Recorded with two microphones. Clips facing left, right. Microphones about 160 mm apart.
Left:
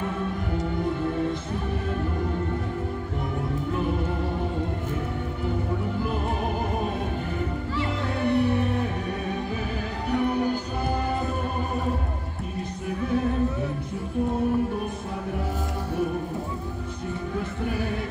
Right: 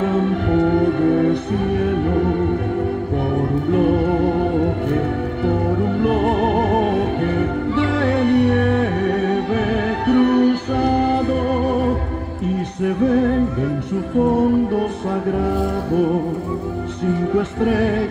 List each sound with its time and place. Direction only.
0.0 s music: 90° right; by 2.4 s 75° right (ahead or behind)
3.7 s music: 75° right (ahead or behind)
17.4 s music: 75° right (ahead or behind)